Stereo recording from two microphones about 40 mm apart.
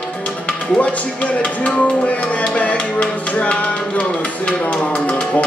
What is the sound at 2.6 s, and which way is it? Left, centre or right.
Music, left.